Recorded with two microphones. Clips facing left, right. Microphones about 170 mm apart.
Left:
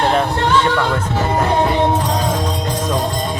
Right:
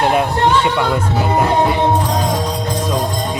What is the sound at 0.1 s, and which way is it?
Speech, 10° right (ahead or behind).